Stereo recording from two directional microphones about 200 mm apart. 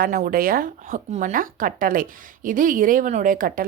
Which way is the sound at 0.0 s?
45° right (ahead or behind).